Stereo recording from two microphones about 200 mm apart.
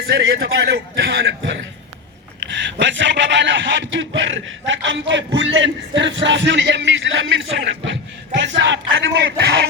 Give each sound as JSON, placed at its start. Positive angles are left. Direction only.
{"t": 0.1, "sound": "speech", "side_deg": -55}